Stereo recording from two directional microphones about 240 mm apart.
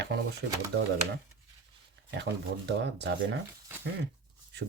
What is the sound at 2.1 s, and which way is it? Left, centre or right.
Speech, right.